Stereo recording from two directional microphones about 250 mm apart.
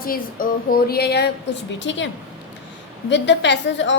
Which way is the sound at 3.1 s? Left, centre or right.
Left.